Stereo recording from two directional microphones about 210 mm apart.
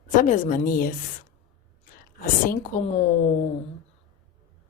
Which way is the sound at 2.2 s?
35° left (ahead or behind).